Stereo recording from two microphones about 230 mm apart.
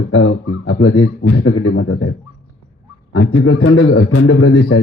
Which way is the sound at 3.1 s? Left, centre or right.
Left.